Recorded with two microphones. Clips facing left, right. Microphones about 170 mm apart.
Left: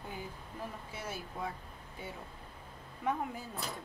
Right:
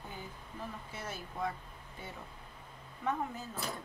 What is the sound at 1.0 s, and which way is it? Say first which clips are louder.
Speech: right 1 dB; 10° left (ahead or behind).